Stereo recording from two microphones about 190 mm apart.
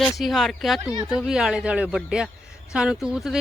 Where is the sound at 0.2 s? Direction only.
Centre (ahead or behind).